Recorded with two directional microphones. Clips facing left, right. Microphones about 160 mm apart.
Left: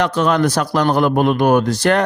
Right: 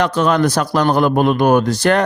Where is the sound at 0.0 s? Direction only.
40° right (ahead or behind).